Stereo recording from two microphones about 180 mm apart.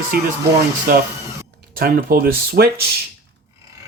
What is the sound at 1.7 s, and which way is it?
Speech, 55° right (ahead or behind).